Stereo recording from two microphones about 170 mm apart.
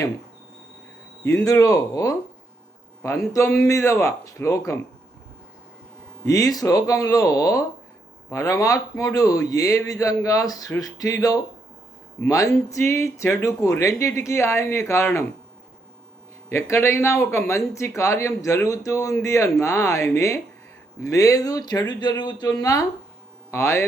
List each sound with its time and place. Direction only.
1.2 s a man's voice: 15° left (ahead or behind)
6.2 s a man's voice: 20° left (ahead or behind)
16.5 s a man's voice: 15° left (ahead or behind)